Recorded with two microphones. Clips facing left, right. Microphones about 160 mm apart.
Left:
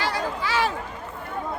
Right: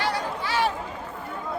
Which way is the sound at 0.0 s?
90° left.